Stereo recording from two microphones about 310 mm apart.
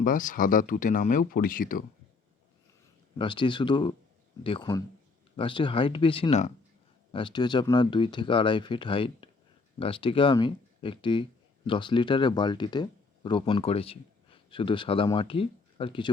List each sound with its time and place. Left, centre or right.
0.0 s speech: left
3.2 s speech: centre